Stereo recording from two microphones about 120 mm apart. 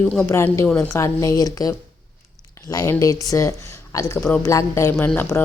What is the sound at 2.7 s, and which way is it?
Speech, 30° left (ahead or behind).